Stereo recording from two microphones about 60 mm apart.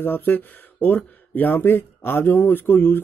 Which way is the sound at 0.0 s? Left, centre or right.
Left.